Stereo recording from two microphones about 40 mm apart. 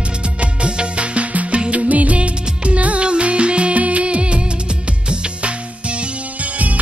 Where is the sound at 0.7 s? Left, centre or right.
Right.